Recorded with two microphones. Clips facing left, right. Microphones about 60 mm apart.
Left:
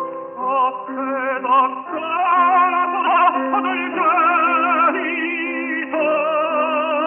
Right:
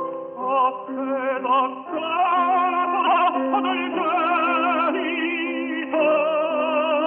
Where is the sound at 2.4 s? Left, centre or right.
Left.